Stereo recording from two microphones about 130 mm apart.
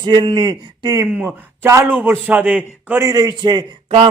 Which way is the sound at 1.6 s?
20° right (ahead or behind).